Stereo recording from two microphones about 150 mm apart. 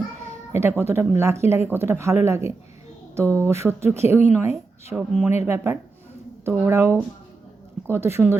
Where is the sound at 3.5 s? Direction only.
15° right (ahead or behind).